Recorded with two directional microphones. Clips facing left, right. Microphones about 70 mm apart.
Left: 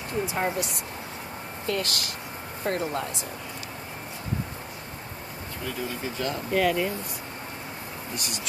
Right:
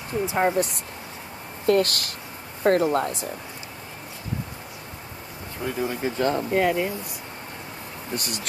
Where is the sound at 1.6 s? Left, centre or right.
Right.